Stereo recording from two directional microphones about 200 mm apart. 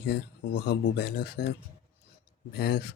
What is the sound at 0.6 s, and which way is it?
Speech, 55° left (ahead or behind).